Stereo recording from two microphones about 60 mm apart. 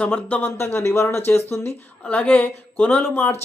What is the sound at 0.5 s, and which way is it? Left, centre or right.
Speech, left.